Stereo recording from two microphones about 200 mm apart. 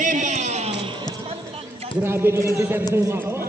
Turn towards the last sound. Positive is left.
turn(degrees=-10)  # may be behind; listen again after turning